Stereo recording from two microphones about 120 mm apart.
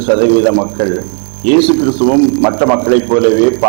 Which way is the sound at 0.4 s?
20° right (ahead or behind).